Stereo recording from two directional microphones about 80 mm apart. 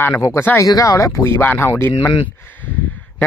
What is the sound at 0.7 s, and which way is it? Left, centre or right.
Speech, left.